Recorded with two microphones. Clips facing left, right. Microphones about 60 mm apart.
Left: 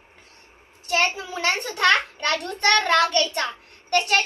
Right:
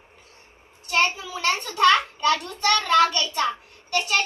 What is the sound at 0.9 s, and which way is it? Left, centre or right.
A child's voice, left.